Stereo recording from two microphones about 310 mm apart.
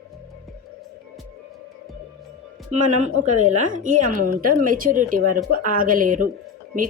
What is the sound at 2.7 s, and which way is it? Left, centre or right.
Speech, right.